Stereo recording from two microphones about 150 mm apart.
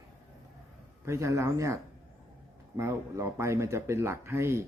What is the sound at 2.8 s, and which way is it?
Speech, 20° right (ahead or behind).